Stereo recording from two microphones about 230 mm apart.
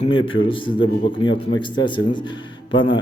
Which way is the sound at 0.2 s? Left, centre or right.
Left.